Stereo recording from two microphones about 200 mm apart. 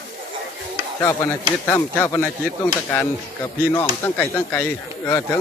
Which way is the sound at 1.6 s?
10° left (ahead or behind).